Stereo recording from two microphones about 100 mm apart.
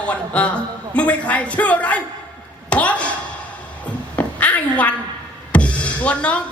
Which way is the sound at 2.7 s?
15° left (ahead or behind).